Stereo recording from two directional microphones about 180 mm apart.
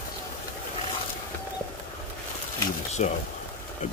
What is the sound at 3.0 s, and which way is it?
Speech, 40° left (ahead or behind).